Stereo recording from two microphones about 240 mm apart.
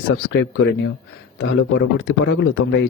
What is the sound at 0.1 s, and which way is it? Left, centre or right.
Speech, left.